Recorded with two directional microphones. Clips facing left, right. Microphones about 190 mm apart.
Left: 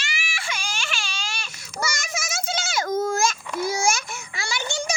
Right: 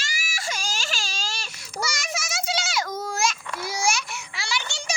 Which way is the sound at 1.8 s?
50° left (ahead or behind).